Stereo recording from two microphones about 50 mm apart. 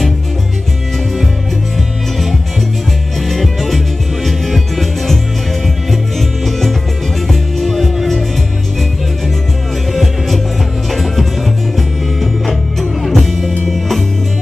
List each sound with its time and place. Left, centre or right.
3.3 s music: centre
10.9 s music: centre